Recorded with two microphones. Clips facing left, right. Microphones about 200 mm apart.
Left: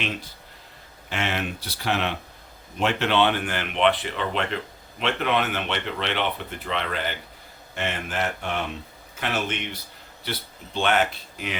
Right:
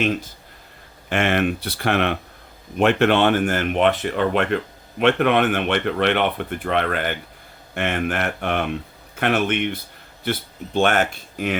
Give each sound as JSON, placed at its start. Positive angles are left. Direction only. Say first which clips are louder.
{"t": 0.0, "sound": "speech", "louder": "right 9 dB", "side_deg": -45}
{"t": 10.8, "sound": "speech", "louder": "right 4 dB", "side_deg": -50}